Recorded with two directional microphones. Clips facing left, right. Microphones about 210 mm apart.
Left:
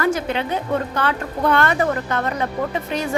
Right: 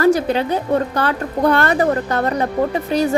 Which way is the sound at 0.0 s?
35° right (ahead or behind).